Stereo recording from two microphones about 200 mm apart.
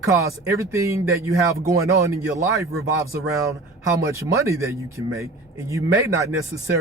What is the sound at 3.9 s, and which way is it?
Speech, 15° right (ahead or behind).